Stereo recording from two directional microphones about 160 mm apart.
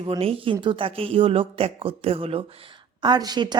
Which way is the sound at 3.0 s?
25° right (ahead or behind).